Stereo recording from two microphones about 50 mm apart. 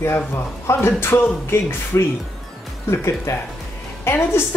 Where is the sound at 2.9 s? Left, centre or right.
Left.